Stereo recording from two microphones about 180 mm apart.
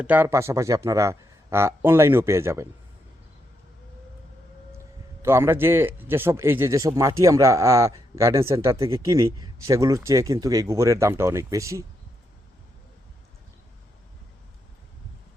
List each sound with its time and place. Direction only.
0.0 s a man's voice: 10° right (ahead or behind)
5.2 s a man's voice: 15° right (ahead or behind)